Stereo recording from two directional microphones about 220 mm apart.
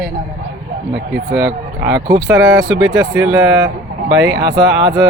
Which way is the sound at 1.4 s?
45° right (ahead or behind).